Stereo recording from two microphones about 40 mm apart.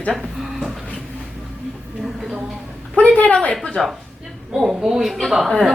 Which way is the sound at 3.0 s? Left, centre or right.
Left.